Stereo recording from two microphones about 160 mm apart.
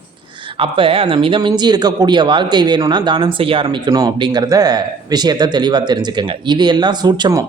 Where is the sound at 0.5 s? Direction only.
35° right (ahead or behind).